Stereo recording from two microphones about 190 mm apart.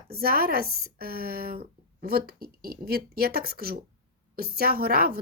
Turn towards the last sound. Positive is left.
turn(degrees=-55)  # may be behind; listen again after turning